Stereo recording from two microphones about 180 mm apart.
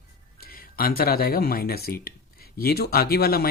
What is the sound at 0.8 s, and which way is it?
Speech, 55° left (ahead or behind).